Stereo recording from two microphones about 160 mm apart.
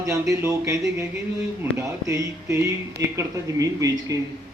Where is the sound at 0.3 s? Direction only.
20° right (ahead or behind).